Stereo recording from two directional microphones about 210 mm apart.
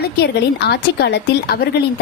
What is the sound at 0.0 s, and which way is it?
A woman's voice, 50° left (ahead or behind).